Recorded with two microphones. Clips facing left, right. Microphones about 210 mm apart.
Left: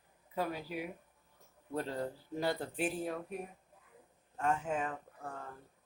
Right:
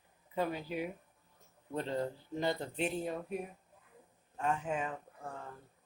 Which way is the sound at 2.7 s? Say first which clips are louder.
Even; 5° left (ahead or behind).